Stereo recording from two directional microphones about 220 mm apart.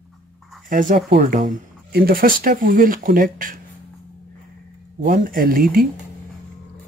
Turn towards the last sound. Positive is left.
turn(degrees=-40)  # may be behind; listen again after turning